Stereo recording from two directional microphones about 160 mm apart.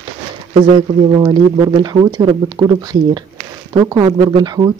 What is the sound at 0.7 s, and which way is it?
Speech, 25° right (ahead or behind).